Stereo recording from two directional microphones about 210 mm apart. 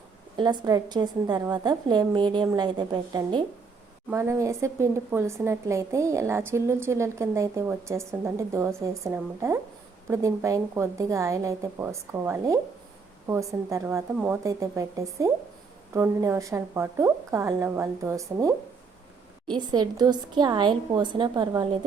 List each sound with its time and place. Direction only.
0.3 s a woman's voice: 20° right (ahead or behind)
19.5 s a woman's voice: 20° right (ahead or behind)